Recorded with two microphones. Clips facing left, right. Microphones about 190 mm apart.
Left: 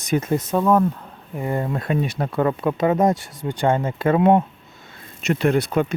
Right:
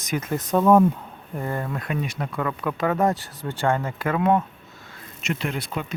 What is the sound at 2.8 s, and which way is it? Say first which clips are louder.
Speech: left 3 dB; 20° left (ahead or behind).